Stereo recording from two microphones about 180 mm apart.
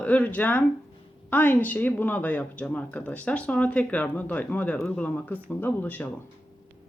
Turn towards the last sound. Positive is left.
turn(degrees=10)  # may be behind; listen again after turning